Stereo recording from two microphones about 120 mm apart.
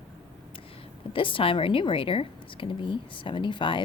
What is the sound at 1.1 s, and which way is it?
A woman's voice, 45° left (ahead or behind).